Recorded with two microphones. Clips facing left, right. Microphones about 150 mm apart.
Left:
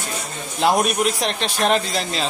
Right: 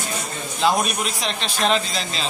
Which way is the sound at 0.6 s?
60° left (ahead or behind).